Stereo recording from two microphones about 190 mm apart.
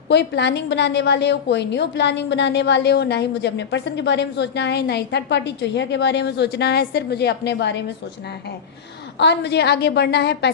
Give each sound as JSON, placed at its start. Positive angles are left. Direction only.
{"t": 0.1, "sound": "a woman's voice", "side_deg": 60}
{"t": 9.1, "sound": "a woman's voice", "side_deg": 65}